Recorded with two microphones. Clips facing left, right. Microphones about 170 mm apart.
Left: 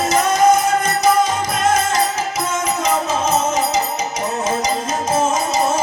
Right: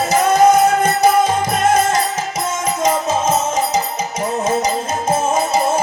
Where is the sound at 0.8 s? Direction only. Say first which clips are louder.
Right 2 dB; 55° right (ahead or behind).